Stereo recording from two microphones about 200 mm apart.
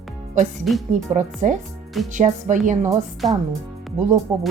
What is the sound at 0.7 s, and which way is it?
Speech, centre (ahead or behind).